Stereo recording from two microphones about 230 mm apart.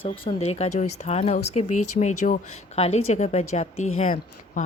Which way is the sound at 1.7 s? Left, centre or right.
Left.